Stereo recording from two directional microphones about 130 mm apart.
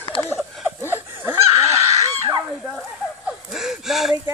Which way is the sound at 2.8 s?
5° right (ahead or behind).